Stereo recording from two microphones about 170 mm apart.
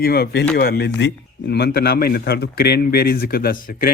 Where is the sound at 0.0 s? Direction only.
70° left (ahead or behind).